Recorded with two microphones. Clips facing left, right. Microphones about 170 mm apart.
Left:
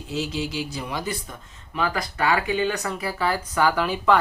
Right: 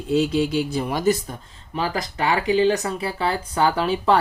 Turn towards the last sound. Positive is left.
turn(degrees=-30)  # may be behind; listen again after turning